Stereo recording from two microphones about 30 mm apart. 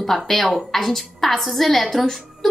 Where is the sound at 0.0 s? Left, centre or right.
Centre.